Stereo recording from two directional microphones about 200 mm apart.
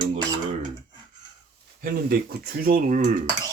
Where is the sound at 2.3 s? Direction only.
45° right (ahead or behind).